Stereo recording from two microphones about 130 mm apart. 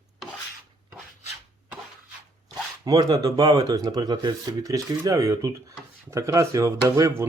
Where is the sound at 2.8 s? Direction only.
30° right (ahead or behind).